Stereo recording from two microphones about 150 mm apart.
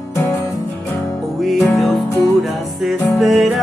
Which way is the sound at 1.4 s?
Centre (ahead or behind).